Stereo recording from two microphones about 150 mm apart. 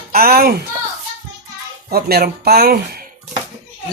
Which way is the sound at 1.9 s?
90° right.